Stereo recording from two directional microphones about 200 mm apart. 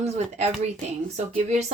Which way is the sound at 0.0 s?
35° right (ahead or behind).